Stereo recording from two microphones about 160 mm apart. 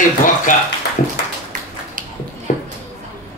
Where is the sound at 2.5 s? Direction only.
55° left (ahead or behind).